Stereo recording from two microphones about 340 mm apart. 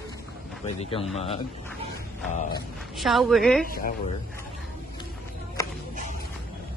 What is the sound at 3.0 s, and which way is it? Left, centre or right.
Speech, centre.